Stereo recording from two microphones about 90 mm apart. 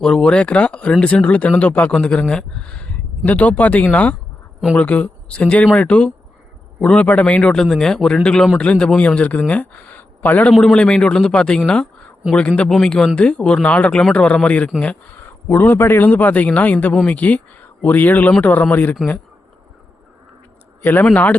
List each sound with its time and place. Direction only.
0.0 s speech: 10° left (ahead or behind)
10.5 s a man's voice: 5° left (ahead or behind)
20.8 s a man's voice: 25° left (ahead or behind)